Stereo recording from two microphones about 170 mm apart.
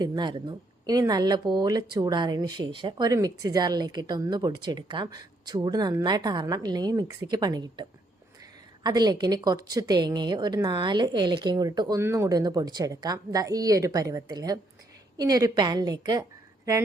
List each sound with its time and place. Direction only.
0.0 s speech: 25° right (ahead or behind)